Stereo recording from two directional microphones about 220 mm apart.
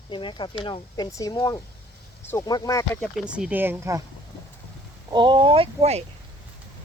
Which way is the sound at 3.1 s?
5° right (ahead or behind).